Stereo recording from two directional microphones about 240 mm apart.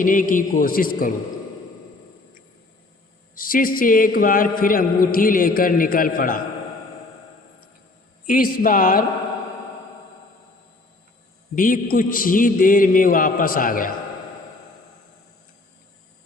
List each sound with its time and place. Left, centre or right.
0.0 s a man's voice: left
3.3 s a man's voice: left
8.3 s a man's voice: left
11.5 s a man's voice: left